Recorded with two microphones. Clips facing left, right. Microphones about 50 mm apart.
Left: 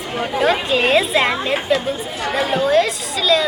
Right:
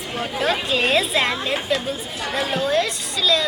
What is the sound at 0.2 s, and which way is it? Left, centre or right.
Speech, centre.